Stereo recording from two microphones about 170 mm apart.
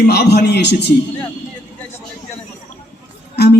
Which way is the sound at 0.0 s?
75° left (ahead or behind).